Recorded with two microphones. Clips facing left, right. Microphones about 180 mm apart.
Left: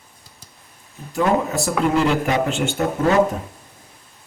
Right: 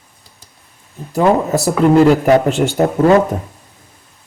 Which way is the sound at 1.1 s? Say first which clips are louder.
Right 6 dB; 35° right (ahead or behind).